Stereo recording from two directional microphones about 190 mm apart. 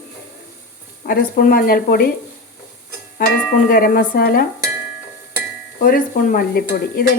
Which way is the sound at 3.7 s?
50° left (ahead or behind).